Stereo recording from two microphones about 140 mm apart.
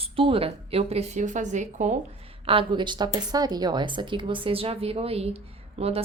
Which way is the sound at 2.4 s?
40° right (ahead or behind).